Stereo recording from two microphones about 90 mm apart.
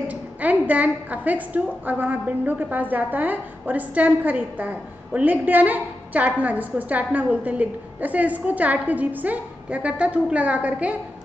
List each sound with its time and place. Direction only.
0.1 s a woman's voice: 15° right (ahead or behind)